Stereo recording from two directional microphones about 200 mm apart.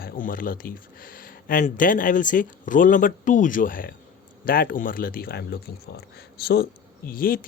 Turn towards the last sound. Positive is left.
turn(degrees=45)  # may be behind; listen again after turning